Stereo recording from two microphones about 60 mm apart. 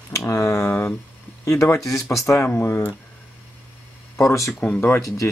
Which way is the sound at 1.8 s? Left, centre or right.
Left.